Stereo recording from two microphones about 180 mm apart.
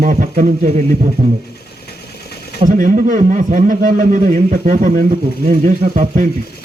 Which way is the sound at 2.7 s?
45° right (ahead or behind).